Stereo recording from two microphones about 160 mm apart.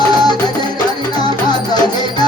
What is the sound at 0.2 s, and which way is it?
Music, 25° left (ahead or behind).